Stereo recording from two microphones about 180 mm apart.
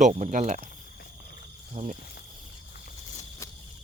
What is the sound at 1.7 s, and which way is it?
Speech, 40° right (ahead or behind).